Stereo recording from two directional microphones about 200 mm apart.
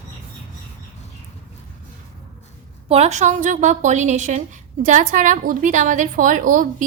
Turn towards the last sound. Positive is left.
turn(degrees=-40)  # may be behind; listen again after turning